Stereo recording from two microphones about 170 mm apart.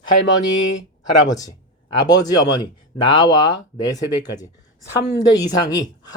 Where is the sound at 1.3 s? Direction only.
20° left (ahead or behind).